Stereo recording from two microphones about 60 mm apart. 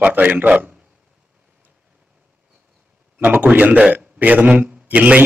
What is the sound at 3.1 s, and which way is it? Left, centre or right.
A man's voice, right.